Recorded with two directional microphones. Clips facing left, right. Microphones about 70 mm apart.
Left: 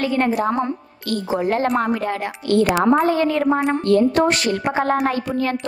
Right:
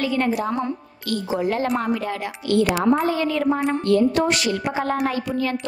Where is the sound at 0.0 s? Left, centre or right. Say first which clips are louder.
Left 3 dB; left.